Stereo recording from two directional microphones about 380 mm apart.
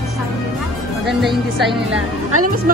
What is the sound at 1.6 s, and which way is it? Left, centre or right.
Speech, centre.